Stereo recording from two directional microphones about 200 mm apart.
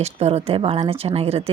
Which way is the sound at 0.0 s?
30° right (ahead or behind).